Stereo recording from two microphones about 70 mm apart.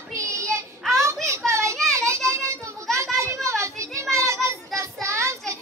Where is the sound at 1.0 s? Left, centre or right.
Right.